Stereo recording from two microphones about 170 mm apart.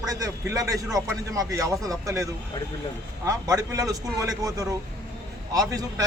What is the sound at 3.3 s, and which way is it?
A man's voice, 20° right (ahead or behind).